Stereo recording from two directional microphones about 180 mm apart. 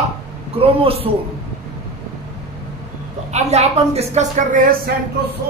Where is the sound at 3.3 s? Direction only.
35° right (ahead or behind).